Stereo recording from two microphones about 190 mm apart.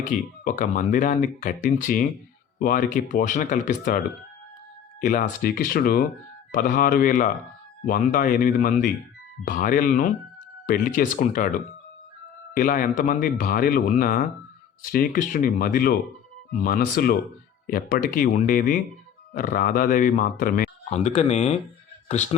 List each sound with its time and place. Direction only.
0.0 s speech: 45° left (ahead or behind)
12.5 s speech: 45° left (ahead or behind)